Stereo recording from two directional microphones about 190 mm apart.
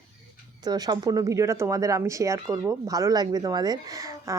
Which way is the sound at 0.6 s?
20° right (ahead or behind).